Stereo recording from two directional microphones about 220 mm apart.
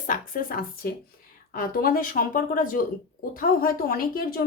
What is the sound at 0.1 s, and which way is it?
A woman's voice, 40° left (ahead or behind).